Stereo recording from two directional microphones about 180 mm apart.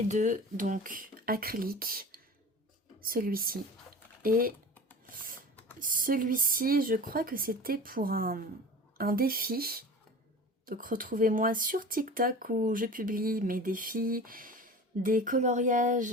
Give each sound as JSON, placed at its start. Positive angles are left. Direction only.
{"t": 0.1, "sound": "speech", "side_deg": -40}
{"t": 5.0, "sound": "filing", "side_deg": -50}
{"t": 5.8, "sound": "speech", "side_deg": -50}